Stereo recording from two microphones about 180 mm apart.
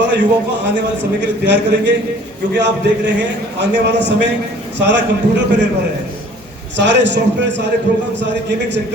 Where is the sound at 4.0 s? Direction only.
75° right (ahead or behind).